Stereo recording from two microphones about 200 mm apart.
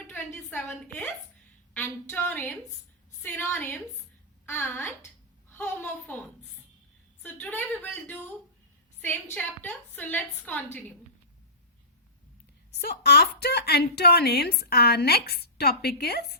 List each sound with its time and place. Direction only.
0.1 s a woman's voice: 5° left (ahead or behind)
9.3 s a woman's voice: 5° left (ahead or behind)
12.8 s a woman's voice: 50° left (ahead or behind)